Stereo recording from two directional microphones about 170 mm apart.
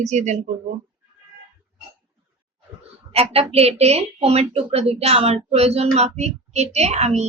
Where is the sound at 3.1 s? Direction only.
35° right (ahead or behind).